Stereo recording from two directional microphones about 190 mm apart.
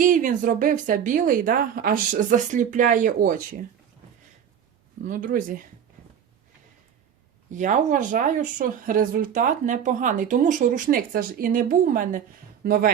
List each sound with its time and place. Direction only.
0.0 s speech: 45° right (ahead or behind)
5.0 s speech: 45° right (ahead or behind)
7.5 s speech: 40° right (ahead or behind)